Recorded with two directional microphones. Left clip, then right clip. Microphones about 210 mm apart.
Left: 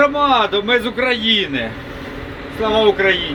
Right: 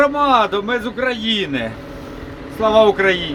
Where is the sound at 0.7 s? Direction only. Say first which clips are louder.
Left 4 dB; centre (ahead or behind).